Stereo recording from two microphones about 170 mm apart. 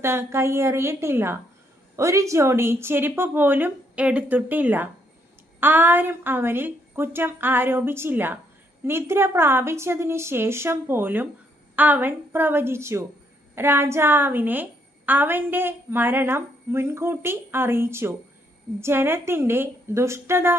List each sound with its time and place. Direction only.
0.0 s a woman's voice: 15° right (ahead or behind)